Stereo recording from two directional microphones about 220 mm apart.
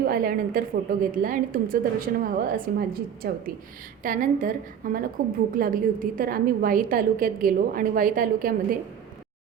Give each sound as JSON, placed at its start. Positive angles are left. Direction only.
{"t": 0.0, "sound": "a woman's voice", "side_deg": -40}